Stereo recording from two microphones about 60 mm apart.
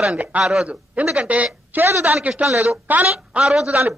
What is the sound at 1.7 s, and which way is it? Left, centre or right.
A man's voice, right.